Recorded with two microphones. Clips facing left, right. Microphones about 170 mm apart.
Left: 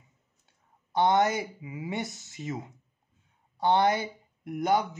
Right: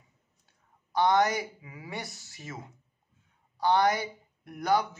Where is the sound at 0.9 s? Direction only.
25° left (ahead or behind).